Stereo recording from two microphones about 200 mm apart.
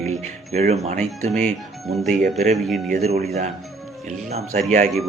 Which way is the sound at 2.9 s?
35° right (ahead or behind).